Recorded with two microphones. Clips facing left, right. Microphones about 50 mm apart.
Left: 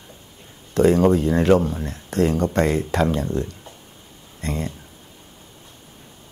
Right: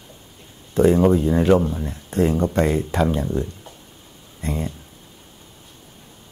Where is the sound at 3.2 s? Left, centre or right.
Centre.